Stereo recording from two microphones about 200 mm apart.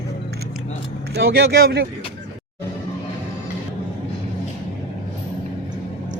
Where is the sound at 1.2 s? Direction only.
55° right (ahead or behind).